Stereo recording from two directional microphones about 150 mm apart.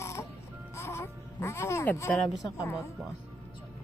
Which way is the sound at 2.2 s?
Centre (ahead or behind).